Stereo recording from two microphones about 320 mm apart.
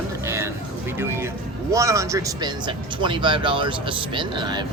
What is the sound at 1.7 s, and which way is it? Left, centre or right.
Speech, centre.